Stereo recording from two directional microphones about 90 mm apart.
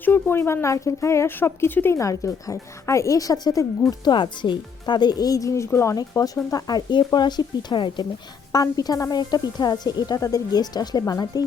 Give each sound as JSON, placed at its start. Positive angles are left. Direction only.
{"t": 0.0, "sound": "a woman's voice", "side_deg": 25}
{"t": 2.0, "sound": "speech", "side_deg": 35}
{"t": 4.1, "sound": "speech", "side_deg": 60}
{"t": 8.5, "sound": "speech", "side_deg": 45}